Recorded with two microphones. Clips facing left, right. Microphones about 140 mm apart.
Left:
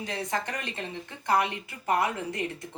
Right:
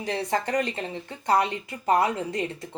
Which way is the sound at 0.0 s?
30° right (ahead or behind).